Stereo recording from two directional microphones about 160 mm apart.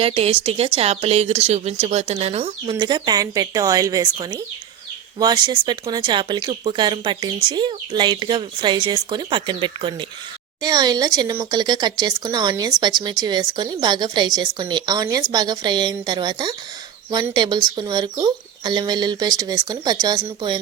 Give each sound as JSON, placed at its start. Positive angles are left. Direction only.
{"t": 0.0, "sound": "a woman's voice", "side_deg": -35}
{"t": 2.7, "sound": "speech", "side_deg": -25}